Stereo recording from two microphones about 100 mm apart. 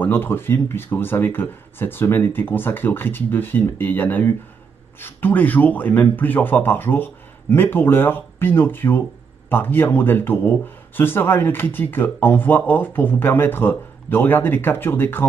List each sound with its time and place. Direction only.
0.0 s speech: 20° left (ahead or behind)